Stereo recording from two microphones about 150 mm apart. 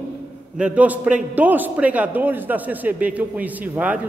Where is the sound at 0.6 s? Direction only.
10° right (ahead or behind).